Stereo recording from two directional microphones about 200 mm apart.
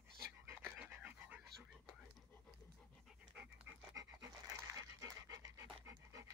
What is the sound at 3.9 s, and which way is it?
Dog, 15° right (ahead or behind).